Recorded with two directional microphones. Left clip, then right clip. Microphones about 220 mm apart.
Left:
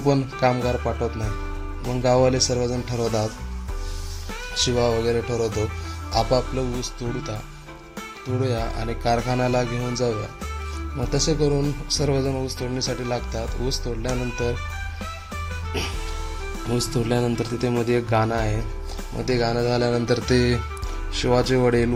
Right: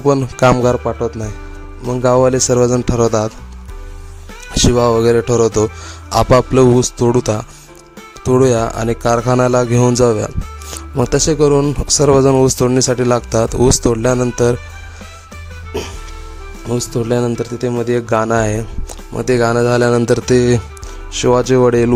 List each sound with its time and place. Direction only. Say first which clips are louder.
0.0 s a man's voice: right 9 dB; 50° right (ahead or behind)
4.5 s a man's voice: right 9 dB; 50° right (ahead or behind)
16.9 s a man's voice: right 9 dB; 40° right (ahead or behind)